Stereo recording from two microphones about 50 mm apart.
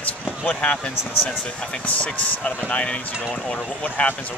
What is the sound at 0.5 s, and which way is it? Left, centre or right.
Speech, centre.